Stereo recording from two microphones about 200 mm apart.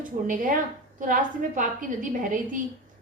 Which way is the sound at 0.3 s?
40° right (ahead or behind).